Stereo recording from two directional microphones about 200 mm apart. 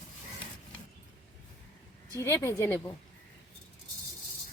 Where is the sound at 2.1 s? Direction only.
15° left (ahead or behind).